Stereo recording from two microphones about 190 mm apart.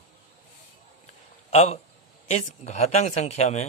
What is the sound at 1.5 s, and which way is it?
A man's voice, 35° left (ahead or behind).